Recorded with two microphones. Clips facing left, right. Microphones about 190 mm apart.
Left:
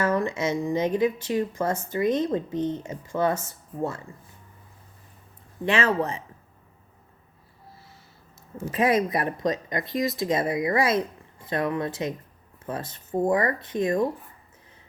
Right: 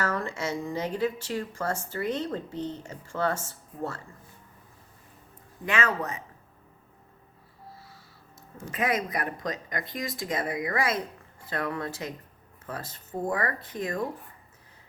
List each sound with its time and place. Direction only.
0.0 s speech: 20° left (ahead or behind)
5.6 s speech: 30° left (ahead or behind)
8.7 s speech: 30° left (ahead or behind)